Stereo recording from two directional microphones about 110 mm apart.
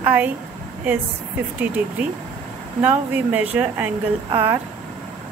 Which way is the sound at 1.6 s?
15° right (ahead or behind).